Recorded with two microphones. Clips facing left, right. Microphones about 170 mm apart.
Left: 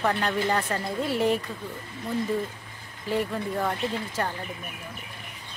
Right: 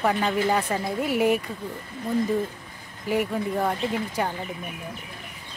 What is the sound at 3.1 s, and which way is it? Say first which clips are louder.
Speech: right 3 dB; 10° right (ahead or behind).